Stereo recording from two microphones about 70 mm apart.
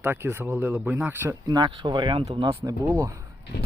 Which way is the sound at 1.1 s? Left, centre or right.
Right.